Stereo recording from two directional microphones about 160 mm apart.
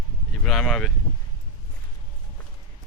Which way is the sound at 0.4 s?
5° left (ahead or behind).